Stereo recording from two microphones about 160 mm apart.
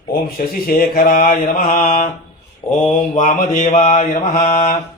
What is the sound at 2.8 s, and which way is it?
Mantra, 40° left (ahead or behind).